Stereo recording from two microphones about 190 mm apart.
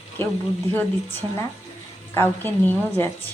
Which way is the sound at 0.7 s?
10° left (ahead or behind).